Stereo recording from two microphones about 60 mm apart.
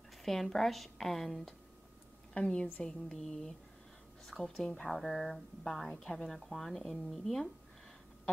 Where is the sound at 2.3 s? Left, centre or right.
Centre.